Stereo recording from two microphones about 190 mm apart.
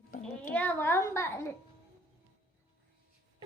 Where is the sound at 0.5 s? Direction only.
10° left (ahead or behind).